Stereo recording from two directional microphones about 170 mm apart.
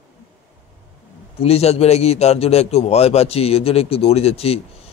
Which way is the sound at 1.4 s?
35° left (ahead or behind).